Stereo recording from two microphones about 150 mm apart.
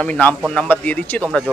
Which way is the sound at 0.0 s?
10° left (ahead or behind).